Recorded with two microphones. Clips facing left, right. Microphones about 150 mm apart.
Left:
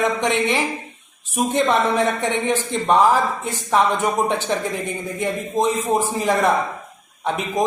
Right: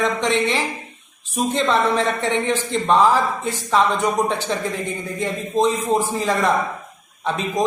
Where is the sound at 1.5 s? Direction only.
15° left (ahead or behind).